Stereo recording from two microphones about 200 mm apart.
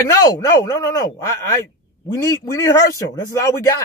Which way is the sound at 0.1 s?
15° left (ahead or behind).